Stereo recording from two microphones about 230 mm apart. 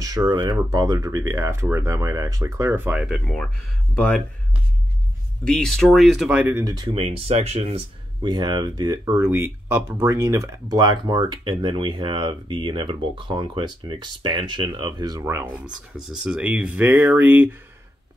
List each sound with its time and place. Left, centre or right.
0.0 s speech: centre
5.4 s speech: centre